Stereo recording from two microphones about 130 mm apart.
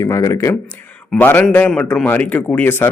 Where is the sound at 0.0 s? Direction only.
25° left (ahead or behind).